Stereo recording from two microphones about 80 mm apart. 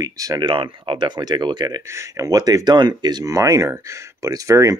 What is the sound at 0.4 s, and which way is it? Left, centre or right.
Speech, right.